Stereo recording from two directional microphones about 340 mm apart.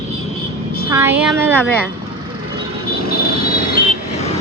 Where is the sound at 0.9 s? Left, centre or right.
Centre.